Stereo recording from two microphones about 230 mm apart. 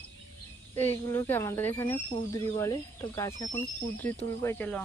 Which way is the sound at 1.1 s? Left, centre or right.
Centre.